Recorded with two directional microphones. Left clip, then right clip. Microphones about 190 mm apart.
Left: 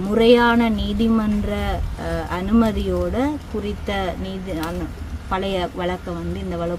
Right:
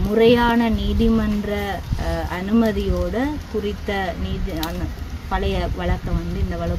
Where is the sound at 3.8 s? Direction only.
15° left (ahead or behind).